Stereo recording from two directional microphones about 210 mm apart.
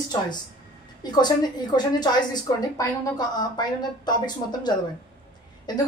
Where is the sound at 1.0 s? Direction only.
20° left (ahead or behind).